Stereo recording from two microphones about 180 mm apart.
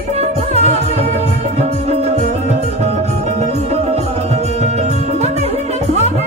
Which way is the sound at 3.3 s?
40° right (ahead or behind).